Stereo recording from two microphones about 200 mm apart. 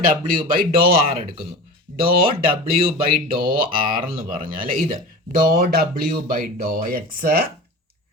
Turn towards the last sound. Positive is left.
turn(degrees=-50)  # may be behind; listen again after turning